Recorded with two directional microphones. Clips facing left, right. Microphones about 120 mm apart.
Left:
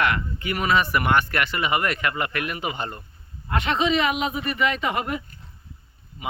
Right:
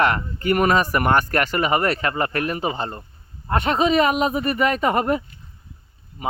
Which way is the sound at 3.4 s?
45° right (ahead or behind).